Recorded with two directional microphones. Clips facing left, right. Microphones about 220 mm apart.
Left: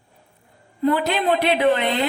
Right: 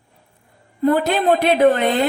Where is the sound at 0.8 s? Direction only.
45° right (ahead or behind).